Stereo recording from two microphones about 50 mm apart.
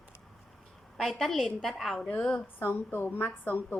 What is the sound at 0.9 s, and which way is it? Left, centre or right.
A woman's voice, centre.